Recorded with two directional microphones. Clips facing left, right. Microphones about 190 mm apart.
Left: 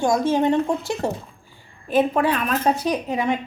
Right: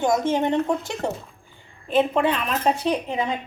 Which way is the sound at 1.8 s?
25° right (ahead or behind).